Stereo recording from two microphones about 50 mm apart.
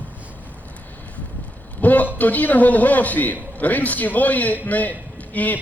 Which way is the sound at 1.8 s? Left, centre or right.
Left.